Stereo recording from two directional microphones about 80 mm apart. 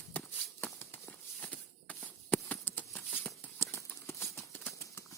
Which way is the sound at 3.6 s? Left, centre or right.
Left.